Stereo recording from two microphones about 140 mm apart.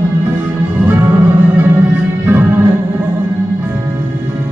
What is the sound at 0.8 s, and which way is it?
Music, 15° right (ahead or behind).